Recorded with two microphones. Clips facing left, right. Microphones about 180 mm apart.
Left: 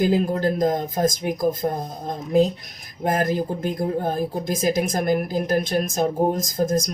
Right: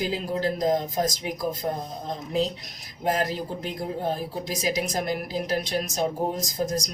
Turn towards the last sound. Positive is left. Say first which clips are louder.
# left 6 dB
turn(degrees=50)  # may be behind; listen again after turning